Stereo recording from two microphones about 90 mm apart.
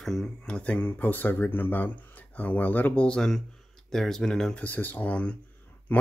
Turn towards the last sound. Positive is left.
turn(degrees=20)  # may be behind; listen again after turning